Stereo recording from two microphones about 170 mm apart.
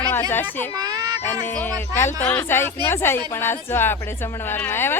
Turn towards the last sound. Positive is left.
turn(degrees=15)  # may be behind; listen again after turning